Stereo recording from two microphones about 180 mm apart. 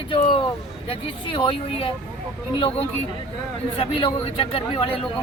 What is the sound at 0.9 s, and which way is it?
Speech, 30° left (ahead or behind).